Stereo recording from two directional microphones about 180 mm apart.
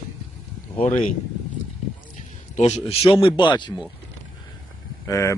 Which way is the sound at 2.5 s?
40° left (ahead or behind).